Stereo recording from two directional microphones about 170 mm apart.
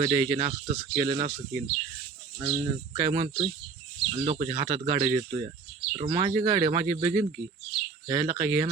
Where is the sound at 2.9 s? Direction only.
30° right (ahead or behind).